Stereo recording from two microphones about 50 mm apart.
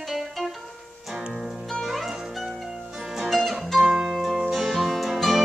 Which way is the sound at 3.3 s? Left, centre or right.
Centre.